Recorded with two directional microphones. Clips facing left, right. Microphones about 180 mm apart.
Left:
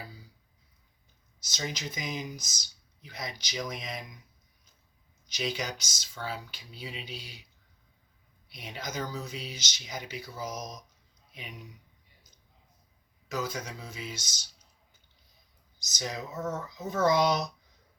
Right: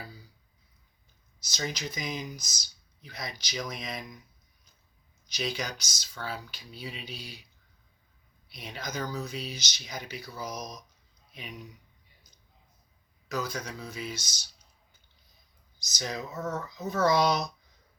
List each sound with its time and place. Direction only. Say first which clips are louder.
1.5 s speech: right 2 dB; 20° left (ahead or behind)
5.2 s speech: even; 20° left (ahead or behind)
8.4 s speech: even; 20° left (ahead or behind)
13.2 s speech: even; 25° left (ahead or behind)
16.0 s speech: right 1 dB; 20° left (ahead or behind)